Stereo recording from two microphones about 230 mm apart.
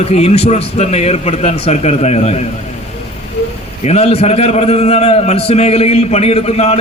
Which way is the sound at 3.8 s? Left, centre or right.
Left.